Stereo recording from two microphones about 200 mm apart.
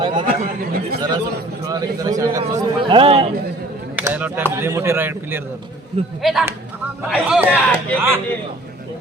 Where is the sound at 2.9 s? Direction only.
30° right (ahead or behind).